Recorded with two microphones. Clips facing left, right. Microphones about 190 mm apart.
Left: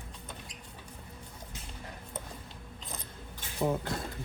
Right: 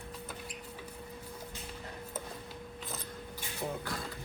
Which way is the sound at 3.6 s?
80° left.